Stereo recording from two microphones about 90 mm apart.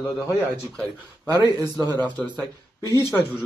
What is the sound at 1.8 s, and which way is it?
Speech, 50° right (ahead or behind).